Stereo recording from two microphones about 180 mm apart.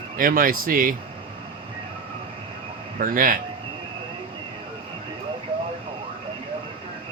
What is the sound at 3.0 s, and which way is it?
Speech, 50° right (ahead or behind).